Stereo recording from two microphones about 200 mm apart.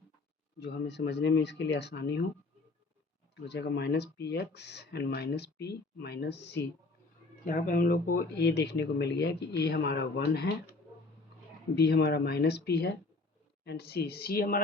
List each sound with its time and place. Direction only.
0.6 s speech: 60° left (ahead or behind)
3.4 s speech: 55° left (ahead or behind)
7.4 s speech: 45° left (ahead or behind)
11.8 s speech: 55° left (ahead or behind)